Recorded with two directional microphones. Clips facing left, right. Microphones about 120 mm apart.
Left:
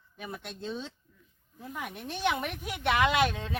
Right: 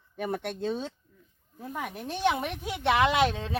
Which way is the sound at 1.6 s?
40° right (ahead or behind).